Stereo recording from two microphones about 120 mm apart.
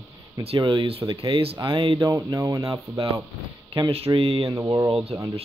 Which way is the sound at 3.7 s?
50° right (ahead or behind).